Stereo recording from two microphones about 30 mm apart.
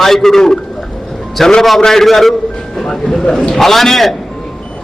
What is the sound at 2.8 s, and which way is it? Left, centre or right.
A man's voice, centre.